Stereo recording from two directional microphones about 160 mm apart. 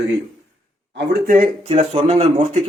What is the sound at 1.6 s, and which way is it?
Speech, 40° right (ahead or behind).